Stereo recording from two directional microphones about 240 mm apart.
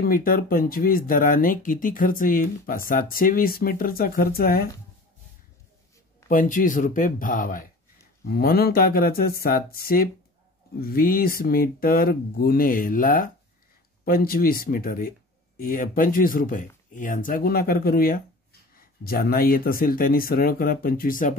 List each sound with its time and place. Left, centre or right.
0.0 s speech: left
6.2 s speech: left